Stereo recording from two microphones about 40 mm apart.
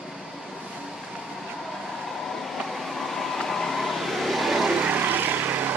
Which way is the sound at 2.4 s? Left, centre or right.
Centre.